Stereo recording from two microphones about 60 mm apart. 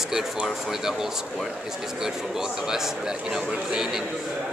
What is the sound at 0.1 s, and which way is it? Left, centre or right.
Speech, centre.